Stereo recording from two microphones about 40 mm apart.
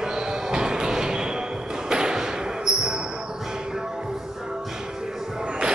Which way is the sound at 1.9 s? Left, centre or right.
Centre.